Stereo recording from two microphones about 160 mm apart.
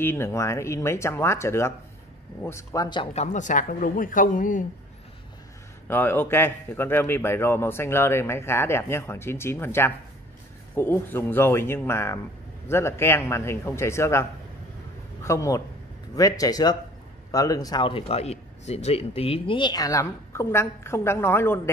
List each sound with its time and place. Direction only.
0.0 s a man's voice: 15° left (ahead or behind)
3.1 s speech: 45° left (ahead or behind)
5.9 s a man's voice: 15° left (ahead or behind)
15.2 s a man's voice: 20° left (ahead or behind)